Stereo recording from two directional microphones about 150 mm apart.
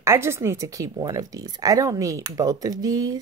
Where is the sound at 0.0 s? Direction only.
15° right (ahead or behind).